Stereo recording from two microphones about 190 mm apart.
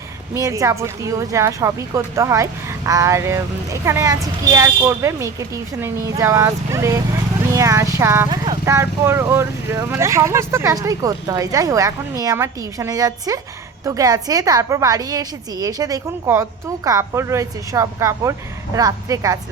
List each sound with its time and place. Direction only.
0.3 s speech: 15° right (ahead or behind)